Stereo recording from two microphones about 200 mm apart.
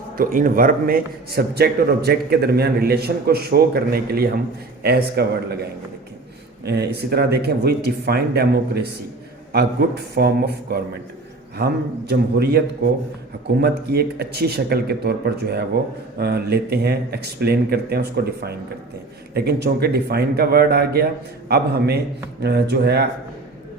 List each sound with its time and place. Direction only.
0.2 s a man's voice: 45° right (ahead or behind)
6.7 s a man's voice: 55° right (ahead or behind)
10.2 s a man's voice: 55° right (ahead or behind)